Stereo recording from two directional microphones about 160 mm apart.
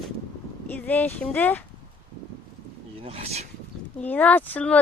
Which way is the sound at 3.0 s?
40° right (ahead or behind).